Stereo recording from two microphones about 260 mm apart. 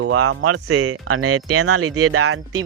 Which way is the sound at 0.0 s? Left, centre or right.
Right.